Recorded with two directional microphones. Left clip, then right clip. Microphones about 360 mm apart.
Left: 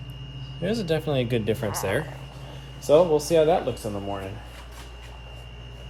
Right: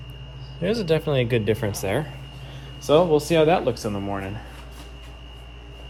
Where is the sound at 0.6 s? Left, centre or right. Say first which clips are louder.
Right 4 dB; centre.